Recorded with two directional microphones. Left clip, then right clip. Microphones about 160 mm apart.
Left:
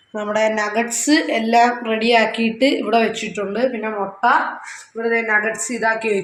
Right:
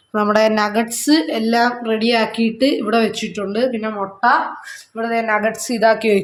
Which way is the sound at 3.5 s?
65° right (ahead or behind).